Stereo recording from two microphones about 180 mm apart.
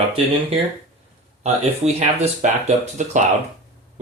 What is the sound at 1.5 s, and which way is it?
Speech, 35° right (ahead or behind).